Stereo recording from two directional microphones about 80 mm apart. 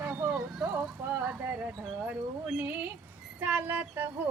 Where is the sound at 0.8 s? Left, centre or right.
Centre.